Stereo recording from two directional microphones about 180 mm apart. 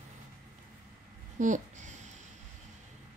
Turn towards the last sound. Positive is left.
turn(degrees=-40)  # may be behind; listen again after turning